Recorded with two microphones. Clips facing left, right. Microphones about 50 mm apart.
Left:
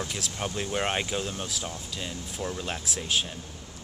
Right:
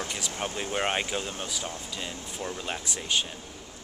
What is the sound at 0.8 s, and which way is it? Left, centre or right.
Speech, centre.